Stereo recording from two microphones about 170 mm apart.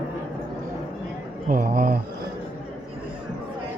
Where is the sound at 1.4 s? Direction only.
55° right (ahead or behind).